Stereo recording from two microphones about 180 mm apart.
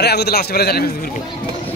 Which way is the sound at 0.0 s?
65° left (ahead or behind).